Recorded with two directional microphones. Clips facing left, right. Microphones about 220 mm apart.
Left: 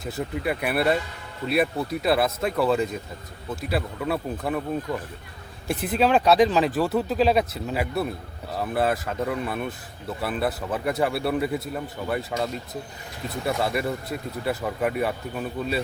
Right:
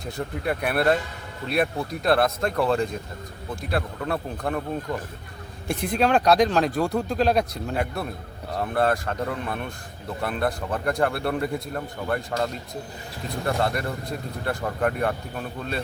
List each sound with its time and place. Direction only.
0.0 s speech: 5° left (ahead or behind)
5.6 s speech: 5° left (ahead or behind)